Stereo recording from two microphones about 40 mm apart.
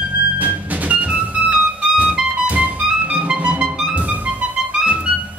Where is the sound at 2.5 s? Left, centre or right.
Right.